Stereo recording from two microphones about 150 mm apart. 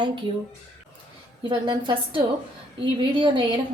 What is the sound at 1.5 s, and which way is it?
Speech, 30° right (ahead or behind).